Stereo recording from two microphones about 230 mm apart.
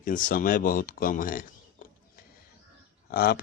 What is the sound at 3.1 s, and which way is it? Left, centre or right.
Speech, left.